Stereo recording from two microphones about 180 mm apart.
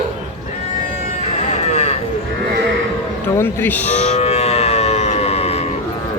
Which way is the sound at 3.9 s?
35° left (ahead or behind).